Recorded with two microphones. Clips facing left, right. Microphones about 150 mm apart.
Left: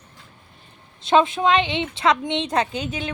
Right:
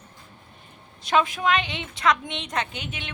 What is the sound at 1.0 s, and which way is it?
A woman's voice, 25° left (ahead or behind).